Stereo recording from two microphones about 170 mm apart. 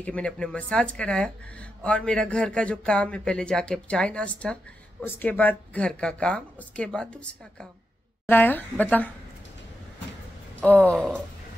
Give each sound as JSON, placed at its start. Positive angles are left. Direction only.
{"t": 0.0, "sound": "a woman's voice", "side_deg": 5}
{"t": 10.6, "sound": "speech", "side_deg": 10}